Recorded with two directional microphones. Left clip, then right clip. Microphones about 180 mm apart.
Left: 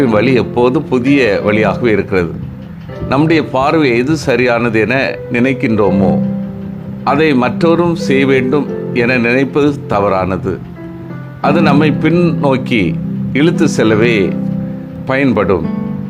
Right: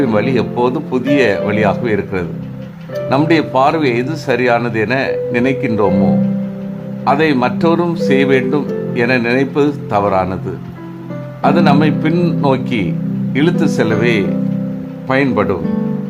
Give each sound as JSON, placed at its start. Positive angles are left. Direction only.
{"t": 0.0, "sound": "speech", "side_deg": 20}
{"t": 3.2, "sound": "speech", "side_deg": 20}
{"t": 5.9, "sound": "speech", "side_deg": 5}
{"t": 7.0, "sound": "speech", "side_deg": 20}